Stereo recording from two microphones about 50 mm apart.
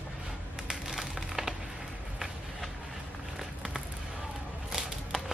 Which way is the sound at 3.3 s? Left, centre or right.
Centre.